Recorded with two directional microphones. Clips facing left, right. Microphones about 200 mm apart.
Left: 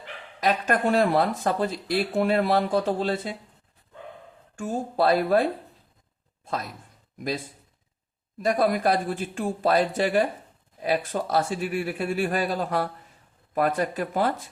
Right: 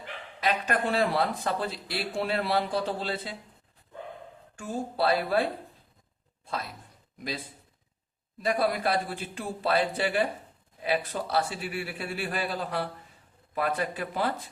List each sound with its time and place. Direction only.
0.3 s speech: 45° left (ahead or behind)
4.5 s speech: 45° left (ahead or behind)
8.4 s speech: 45° left (ahead or behind)